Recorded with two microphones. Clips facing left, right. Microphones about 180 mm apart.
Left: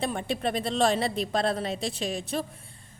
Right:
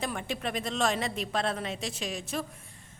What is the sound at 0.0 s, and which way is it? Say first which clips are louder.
A woman's voice: left 5 dB; 30° left (ahead or behind).